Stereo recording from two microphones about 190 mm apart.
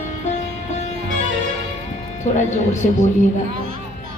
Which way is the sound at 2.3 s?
40° left (ahead or behind).